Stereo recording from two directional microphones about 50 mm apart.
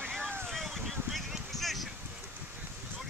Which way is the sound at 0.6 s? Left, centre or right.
Centre.